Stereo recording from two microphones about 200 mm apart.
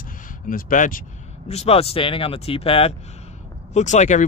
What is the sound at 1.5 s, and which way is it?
Speech, 30° left (ahead or behind).